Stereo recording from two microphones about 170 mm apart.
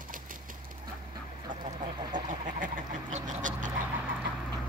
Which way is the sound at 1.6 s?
50° right (ahead or behind).